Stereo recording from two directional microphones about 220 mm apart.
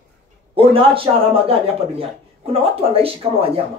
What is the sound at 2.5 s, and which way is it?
Speech, 25° right (ahead or behind).